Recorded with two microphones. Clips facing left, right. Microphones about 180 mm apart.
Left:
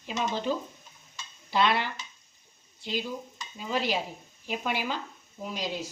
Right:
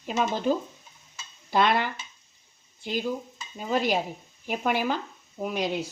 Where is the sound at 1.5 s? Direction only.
50° right (ahead or behind).